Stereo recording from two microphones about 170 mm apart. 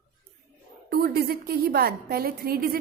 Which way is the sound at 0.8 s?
65° right (ahead or behind).